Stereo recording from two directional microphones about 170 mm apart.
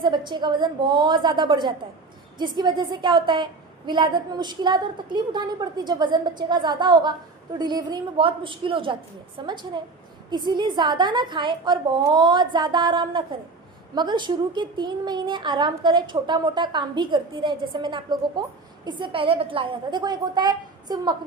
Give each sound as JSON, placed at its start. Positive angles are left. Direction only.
{"t": 0.0, "sound": "a woman's voice", "side_deg": -25}